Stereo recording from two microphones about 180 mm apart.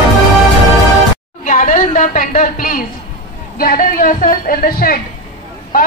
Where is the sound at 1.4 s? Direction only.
45° left (ahead or behind).